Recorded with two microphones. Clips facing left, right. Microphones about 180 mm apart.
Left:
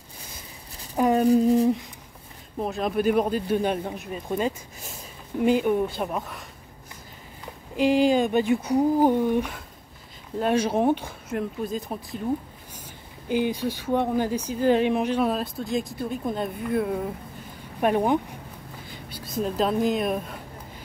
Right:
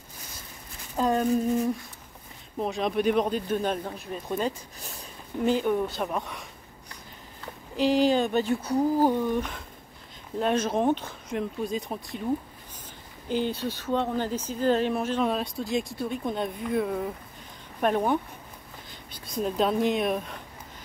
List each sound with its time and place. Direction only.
0.9 s a sound: 15° left (ahead or behind)
1.2 s a sound: 35° left (ahead or behind)
2.6 s speech: centre (ahead or behind)
7.7 s speech: 10° left (ahead or behind)
13.3 s speech: 10° left (ahead or behind)
15.2 s speech: centre (ahead or behind)